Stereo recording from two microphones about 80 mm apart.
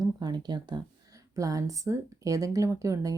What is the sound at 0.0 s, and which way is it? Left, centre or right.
Speech, right.